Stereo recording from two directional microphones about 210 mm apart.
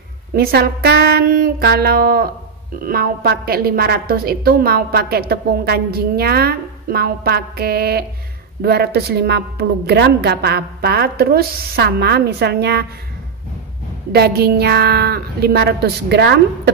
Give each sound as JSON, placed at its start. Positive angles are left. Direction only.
{"t": 0.4, "sound": "a woman's voice", "side_deg": -45}
{"t": 14.1, "sound": "a woman's voice", "side_deg": -50}